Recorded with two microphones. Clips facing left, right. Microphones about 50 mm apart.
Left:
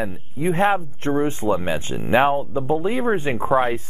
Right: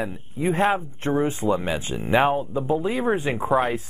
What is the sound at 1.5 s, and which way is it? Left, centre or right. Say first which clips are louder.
Speech: left 2 dB; centre.